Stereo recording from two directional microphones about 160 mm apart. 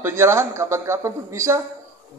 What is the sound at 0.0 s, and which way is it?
A man's voice, 15° right (ahead or behind).